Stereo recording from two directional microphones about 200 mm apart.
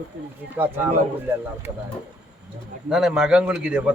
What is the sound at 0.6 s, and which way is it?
Speech, 10° right (ahead or behind).